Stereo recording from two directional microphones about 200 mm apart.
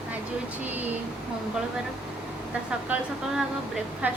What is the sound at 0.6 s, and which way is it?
Speech, 10° right (ahead or behind).